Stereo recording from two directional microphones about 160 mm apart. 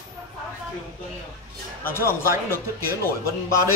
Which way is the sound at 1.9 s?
15° left (ahead or behind).